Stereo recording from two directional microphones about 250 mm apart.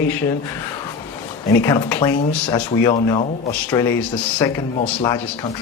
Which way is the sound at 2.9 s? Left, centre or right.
Centre.